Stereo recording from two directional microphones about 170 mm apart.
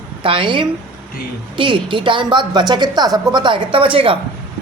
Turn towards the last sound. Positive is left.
turn(degrees=-30)  # may be behind; listen again after turning